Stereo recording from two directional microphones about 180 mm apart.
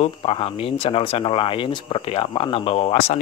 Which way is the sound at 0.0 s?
30° left (ahead or behind).